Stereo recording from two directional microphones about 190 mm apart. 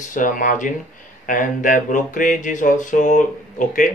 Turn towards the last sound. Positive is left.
turn(degrees=45)  # may be behind; listen again after turning